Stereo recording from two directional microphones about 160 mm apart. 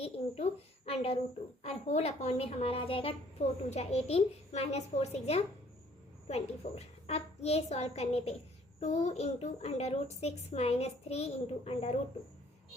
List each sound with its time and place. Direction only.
0.0 s a child's voice: 40° left (ahead or behind)